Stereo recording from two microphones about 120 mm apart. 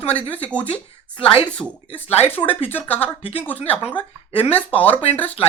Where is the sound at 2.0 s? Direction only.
60° left (ahead or behind).